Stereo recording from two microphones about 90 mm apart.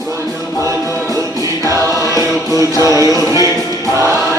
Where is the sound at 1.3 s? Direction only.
40° left (ahead or behind).